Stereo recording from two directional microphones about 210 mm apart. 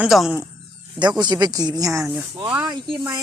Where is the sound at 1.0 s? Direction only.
20° right (ahead or behind).